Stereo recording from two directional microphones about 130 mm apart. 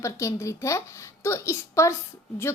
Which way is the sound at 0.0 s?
20° left (ahead or behind).